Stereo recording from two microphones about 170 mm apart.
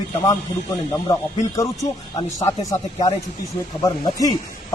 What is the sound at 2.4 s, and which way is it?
A man's voice, 20° left (ahead or behind).